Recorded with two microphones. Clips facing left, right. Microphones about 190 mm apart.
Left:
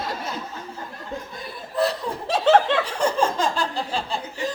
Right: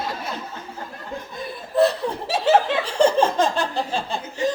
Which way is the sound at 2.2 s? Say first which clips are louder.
Left 1 dB; 5° right (ahead or behind).